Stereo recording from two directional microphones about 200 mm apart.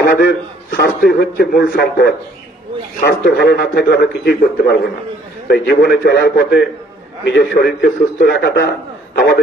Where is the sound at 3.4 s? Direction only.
55° left (ahead or behind).